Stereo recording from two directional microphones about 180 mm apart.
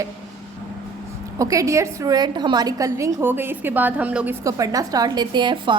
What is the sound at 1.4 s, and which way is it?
A woman's voice, 20° right (ahead or behind).